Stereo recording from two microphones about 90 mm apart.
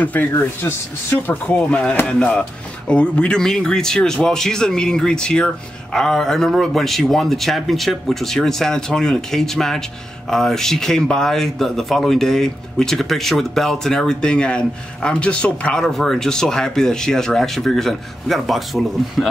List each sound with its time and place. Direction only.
0.0 s speech: 20° left (ahead or behind)
1.1 s speech: 15° left (ahead or behind)